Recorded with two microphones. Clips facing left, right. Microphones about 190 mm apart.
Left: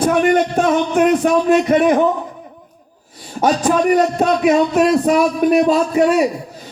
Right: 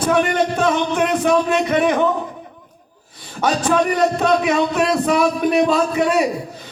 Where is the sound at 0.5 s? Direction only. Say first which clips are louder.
Left 3 dB; 45° left (ahead or behind).